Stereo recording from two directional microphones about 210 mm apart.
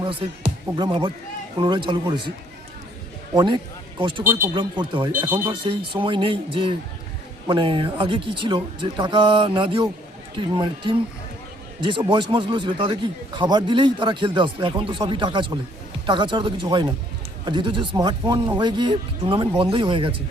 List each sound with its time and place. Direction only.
0.8 s speech: 20° right (ahead or behind)
3.3 s speech: 20° right (ahead or behind)
5.2 s speech: 10° right (ahead or behind)
5.5 s speech: 25° right (ahead or behind)